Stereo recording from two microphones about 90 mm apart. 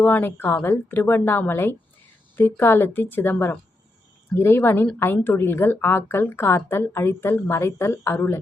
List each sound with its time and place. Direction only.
0.0 s a woman's voice: 20° left (ahead or behind)